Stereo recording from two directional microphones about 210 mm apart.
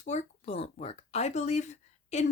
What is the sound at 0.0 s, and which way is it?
Speech, 35° left (ahead or behind).